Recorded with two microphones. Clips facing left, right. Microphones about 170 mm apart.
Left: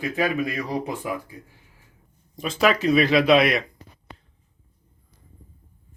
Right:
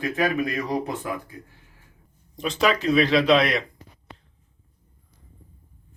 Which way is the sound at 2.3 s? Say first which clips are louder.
Left 1 dB; centre (ahead or behind).